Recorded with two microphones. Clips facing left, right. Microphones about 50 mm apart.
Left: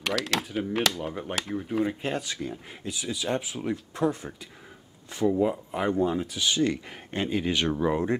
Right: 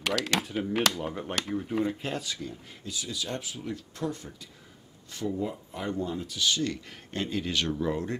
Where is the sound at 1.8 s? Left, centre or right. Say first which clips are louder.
Left 2 dB; centre.